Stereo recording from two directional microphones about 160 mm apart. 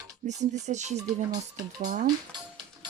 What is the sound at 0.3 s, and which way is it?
Speech, 45° right (ahead or behind).